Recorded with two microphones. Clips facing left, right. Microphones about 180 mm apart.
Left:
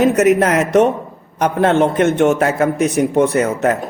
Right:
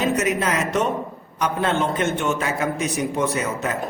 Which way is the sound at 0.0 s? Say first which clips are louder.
Left 9 dB; 65° left (ahead or behind).